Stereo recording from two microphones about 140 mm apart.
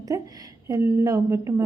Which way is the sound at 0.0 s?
25° right (ahead or behind).